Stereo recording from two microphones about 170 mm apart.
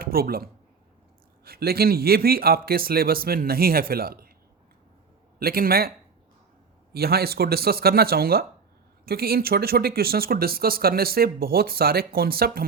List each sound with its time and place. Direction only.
0.0 s speech: 60° right (ahead or behind)
5.4 s speech: 60° right (ahead or behind)
6.9 s speech: 65° right (ahead or behind)